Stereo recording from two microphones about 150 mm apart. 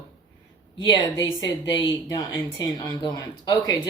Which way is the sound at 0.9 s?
30° left (ahead or behind).